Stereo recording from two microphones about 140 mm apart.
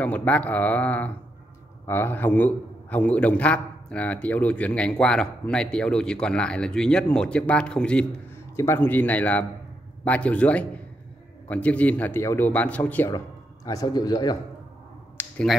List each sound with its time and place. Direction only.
0.0 s a man's voice: 10° left (ahead or behind)
13.7 s a man's voice: 25° left (ahead or behind)
15.2 s a sound: 15° left (ahead or behind)